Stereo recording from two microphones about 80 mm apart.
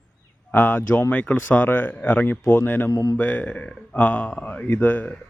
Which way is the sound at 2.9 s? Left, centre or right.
Left.